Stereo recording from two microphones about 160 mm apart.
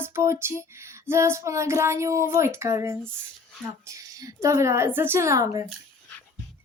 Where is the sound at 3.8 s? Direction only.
20° right (ahead or behind).